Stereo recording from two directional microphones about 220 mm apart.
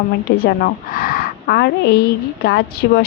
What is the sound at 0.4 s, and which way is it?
A woman's voice, 40° left (ahead or behind).